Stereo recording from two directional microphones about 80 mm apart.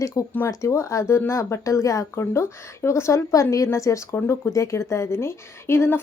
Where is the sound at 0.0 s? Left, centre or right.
Left.